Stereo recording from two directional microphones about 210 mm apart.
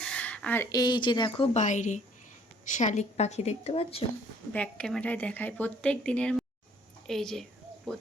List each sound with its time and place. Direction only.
0.0 s speech: 5° left (ahead or behind); by 1.5 s 20° left (ahead or behind)
1.5 s a woman's voice: 35° left (ahead or behind)
4.5 s speech: 5° left (ahead or behind)